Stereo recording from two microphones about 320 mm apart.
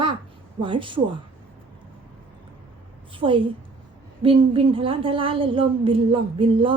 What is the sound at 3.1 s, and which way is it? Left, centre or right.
A woman's voice, centre.